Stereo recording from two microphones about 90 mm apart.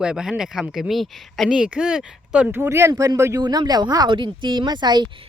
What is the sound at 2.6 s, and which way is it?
Speech, 35° right (ahead or behind).